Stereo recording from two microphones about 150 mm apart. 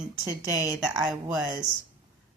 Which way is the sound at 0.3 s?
15° right (ahead or behind).